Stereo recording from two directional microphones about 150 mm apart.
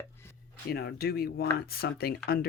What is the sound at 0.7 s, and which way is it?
Speech, 90° left.